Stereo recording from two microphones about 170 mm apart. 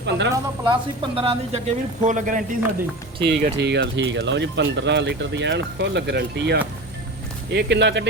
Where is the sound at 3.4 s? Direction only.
80° right.